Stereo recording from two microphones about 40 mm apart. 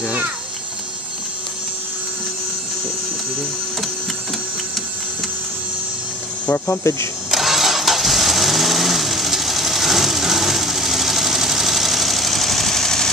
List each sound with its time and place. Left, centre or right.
0.0 s a sound: right
6.5 s speech: left
7.2 s engine starting: centre